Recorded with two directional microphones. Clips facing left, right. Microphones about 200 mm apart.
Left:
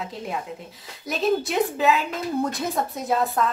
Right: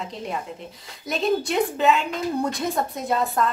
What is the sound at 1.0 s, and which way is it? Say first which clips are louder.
A woman's voice: even; centre (ahead or behind).